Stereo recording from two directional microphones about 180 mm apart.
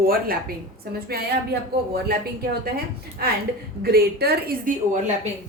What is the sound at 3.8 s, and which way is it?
A woman's voice, 60° right (ahead or behind).